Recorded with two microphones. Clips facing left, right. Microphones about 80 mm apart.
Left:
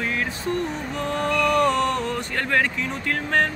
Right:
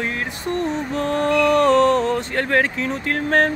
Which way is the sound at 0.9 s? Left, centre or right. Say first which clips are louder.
Right 5 dB; right.